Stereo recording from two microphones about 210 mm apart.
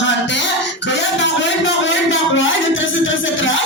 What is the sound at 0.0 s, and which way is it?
Music, 60° left (ahead or behind).